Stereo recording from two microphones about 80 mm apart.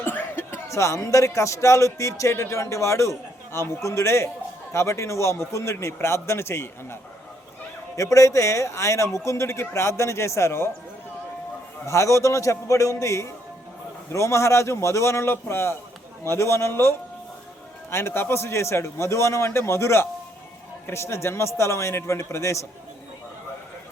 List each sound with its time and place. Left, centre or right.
0.0 s a sound: left
0.7 s speech: left
7.9 s speech: left
11.9 s speech: left
17.9 s speech: left